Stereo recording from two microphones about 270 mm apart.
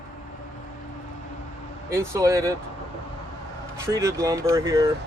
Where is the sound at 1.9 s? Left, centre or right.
Centre.